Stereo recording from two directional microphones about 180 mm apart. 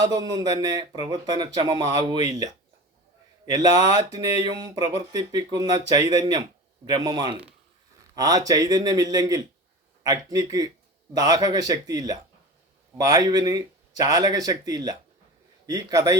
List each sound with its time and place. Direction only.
0.0 s speech: 20° right (ahead or behind)